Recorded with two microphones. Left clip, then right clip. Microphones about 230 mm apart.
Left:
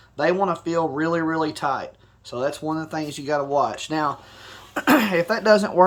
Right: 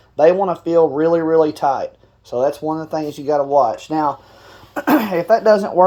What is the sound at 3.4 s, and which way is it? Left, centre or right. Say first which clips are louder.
Speech: right 8 dB; centre.